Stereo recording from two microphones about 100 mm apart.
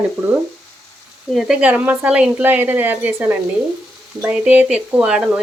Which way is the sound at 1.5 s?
15° right (ahead or behind).